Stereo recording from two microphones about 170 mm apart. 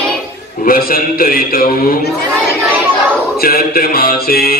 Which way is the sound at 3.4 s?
60° left (ahead or behind).